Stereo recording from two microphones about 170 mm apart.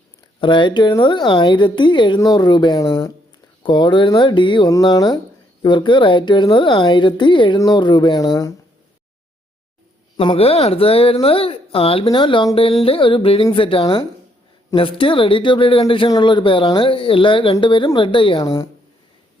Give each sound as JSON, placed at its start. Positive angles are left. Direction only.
{"t": 0.3, "sound": "speech", "side_deg": 30}
{"t": 10.2, "sound": "speech", "side_deg": 35}